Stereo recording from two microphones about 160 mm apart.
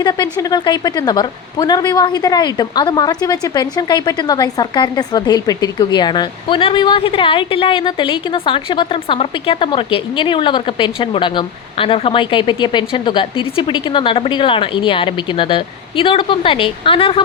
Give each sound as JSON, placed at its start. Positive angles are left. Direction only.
{"t": 0.0, "sound": "a woman's voice", "side_deg": 25}